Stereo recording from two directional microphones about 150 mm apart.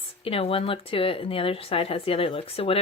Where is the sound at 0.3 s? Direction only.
40° left (ahead or behind).